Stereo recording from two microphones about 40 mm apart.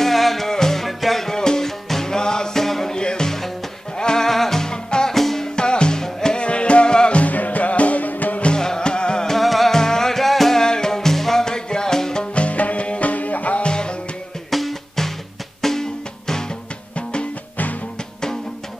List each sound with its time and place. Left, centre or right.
0.0 s music: centre
1.3 s music: centre
2.9 s music: centre
5.6 s music: left
6.4 s music: left
7.2 s music: left
8.5 s music: centre
9.3 s music: centre
9.8 s music: centre
10.6 s music: centre
12.4 s music: left
13.7 s music: left
14.5 s music: centre
16.9 s music: left